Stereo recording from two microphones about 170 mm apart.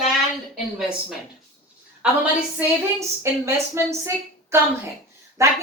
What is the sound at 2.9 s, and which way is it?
A woman's voice, 15° right (ahead or behind).